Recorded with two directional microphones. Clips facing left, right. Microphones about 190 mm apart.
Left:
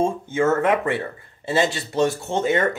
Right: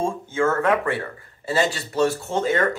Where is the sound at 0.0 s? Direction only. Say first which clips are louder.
Left 2 dB; 20° left (ahead or behind).